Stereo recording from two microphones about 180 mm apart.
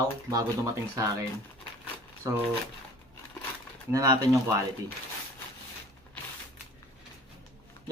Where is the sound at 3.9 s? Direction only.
20° right (ahead or behind).